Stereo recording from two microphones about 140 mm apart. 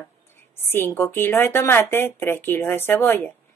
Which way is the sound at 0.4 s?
15° left (ahead or behind).